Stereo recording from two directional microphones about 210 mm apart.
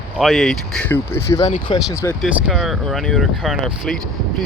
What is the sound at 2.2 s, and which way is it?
Speech, centre (ahead or behind).